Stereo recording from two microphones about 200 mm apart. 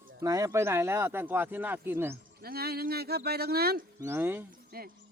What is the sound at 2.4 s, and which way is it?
Speech, 50° right (ahead or behind).